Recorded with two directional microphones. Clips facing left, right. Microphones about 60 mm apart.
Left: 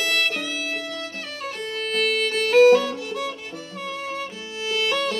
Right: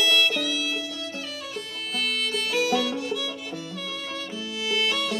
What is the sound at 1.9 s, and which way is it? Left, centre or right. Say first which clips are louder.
Music: left 5 dB; left.